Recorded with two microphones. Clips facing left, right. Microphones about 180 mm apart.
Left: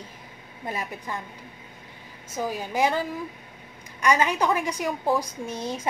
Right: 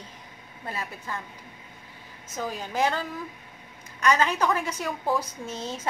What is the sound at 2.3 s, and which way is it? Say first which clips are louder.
A woman's voice: left 3 dB; 10° left (ahead or behind).